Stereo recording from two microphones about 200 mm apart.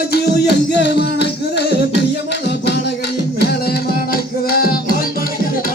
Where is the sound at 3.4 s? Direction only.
50° left (ahead or behind).